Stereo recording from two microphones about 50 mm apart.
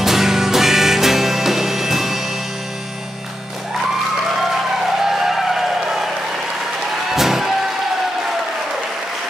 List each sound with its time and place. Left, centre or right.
0.0 s music: centre
5.0 s music: centre
7.2 s music: centre